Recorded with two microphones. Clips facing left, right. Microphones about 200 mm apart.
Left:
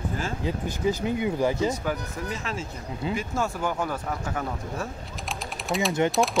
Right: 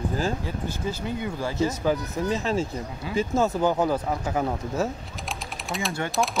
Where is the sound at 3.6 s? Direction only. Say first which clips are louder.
Right 6 dB; 35° right (ahead or behind).